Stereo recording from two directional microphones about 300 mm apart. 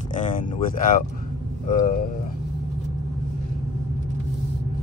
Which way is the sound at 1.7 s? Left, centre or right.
Left.